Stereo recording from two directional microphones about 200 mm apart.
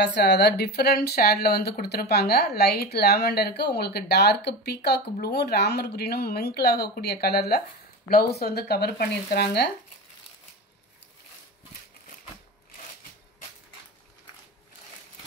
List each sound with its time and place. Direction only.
0.0 s speech: 60° left (ahead or behind)